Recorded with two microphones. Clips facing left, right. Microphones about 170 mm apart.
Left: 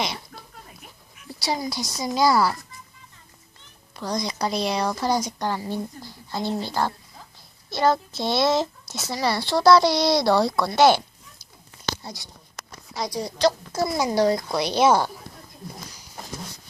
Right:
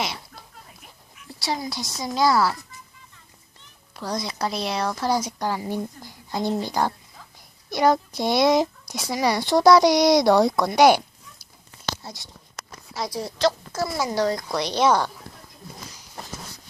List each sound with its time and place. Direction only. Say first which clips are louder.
1.4 s speech: left 1 dB; centre (ahead or behind)
3.9 s speech: left 1 dB; 5° right (ahead or behind)
12.9 s a woman's voice: left 1 dB; 5° right (ahead or behind)
13.7 s speech: left 2 dB; 15° left (ahead or behind)